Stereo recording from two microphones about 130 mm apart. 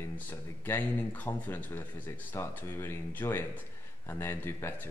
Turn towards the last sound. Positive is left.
turn(degrees=15)  # may be behind; listen again after turning